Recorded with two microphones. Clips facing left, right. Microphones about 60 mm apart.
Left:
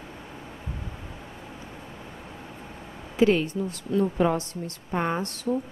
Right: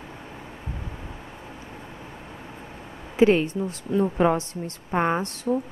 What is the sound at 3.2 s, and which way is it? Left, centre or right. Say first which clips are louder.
A woman's voice: right 3 dB; right.